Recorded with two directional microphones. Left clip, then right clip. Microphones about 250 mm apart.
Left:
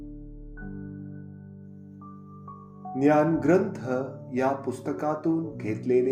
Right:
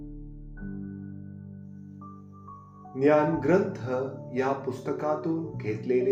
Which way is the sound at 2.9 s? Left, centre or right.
Left.